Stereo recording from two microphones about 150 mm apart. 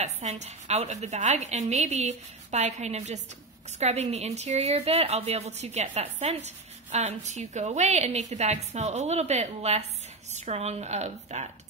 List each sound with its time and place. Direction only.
0.0 s a woman's voice: 50° right (ahead or behind)